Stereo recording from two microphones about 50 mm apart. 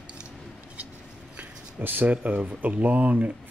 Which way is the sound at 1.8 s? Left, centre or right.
Right.